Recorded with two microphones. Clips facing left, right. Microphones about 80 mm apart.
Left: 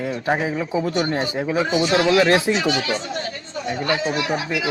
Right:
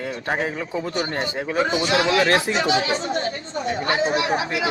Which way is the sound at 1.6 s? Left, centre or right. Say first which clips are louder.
Left 1 dB; right.